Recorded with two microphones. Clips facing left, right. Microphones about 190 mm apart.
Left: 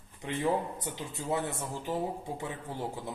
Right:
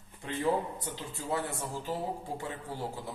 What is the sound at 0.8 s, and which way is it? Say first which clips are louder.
Speech: left 2 dB; 20° left (ahead or behind).